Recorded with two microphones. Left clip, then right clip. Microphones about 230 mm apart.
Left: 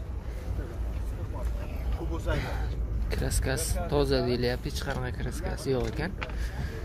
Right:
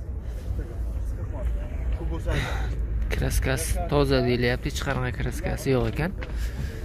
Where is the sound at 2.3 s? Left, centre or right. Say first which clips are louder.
Right 4 dB; centre.